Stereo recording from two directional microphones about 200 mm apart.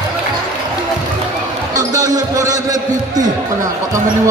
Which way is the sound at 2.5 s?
20° right (ahead or behind).